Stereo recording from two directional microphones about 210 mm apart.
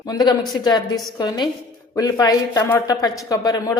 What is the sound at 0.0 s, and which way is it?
A woman's voice, 20° left (ahead or behind).